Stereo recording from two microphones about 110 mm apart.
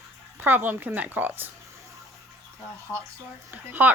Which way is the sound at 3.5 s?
15° right (ahead or behind).